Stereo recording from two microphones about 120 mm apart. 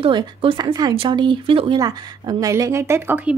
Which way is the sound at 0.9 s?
45° right (ahead or behind).